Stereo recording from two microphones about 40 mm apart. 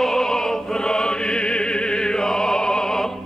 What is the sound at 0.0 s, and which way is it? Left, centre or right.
Music, centre.